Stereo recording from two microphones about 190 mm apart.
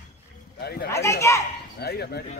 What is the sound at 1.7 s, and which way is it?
Speech, 60° left (ahead or behind).